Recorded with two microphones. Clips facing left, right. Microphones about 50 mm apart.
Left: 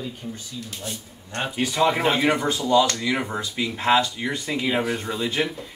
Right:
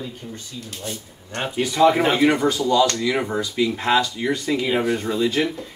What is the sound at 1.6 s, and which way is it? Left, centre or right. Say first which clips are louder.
Speech: right 5 dB; centre.